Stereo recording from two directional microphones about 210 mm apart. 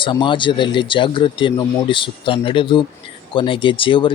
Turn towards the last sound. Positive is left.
turn(degrees=25)  # may be behind; listen again after turning